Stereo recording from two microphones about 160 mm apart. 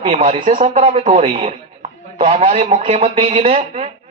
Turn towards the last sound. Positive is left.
turn(degrees=-40)  # may be behind; listen again after turning